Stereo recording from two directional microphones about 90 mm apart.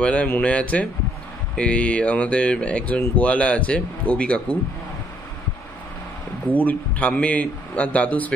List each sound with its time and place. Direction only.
0.0 s speech: 15° left (ahead or behind)
6.4 s speech: 20° left (ahead or behind)